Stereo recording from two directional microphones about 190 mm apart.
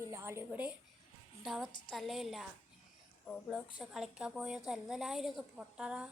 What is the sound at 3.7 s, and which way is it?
A woman's voice, 5° right (ahead or behind).